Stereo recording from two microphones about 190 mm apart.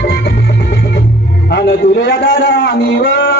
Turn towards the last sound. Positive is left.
turn(degrees=65)  # may be behind; listen again after turning